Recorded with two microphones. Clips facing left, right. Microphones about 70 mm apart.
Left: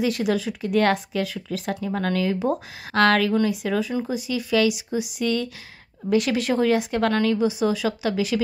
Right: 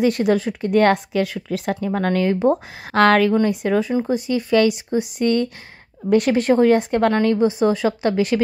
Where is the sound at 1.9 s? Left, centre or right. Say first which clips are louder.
Right 4 dB; right.